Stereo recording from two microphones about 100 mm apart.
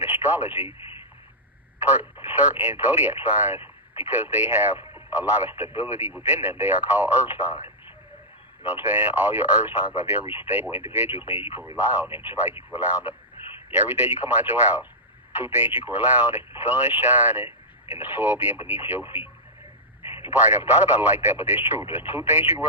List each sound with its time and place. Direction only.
0.0 s speech: 20° right (ahead or behind)
1.9 s speech: 20° right (ahead or behind)
20.1 s speech: 25° right (ahead or behind)